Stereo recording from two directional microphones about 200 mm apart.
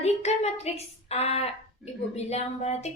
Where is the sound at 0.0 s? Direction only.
30° left (ahead or behind).